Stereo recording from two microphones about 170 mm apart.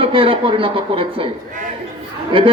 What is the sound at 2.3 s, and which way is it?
Speech, 30° right (ahead or behind).